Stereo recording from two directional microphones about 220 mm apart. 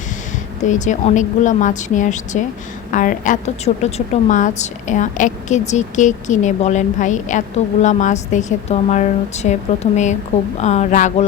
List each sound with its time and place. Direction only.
0.6 s a woman's voice: 35° left (ahead or behind)